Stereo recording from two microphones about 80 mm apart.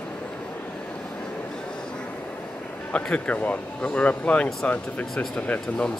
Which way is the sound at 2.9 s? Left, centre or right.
Centre.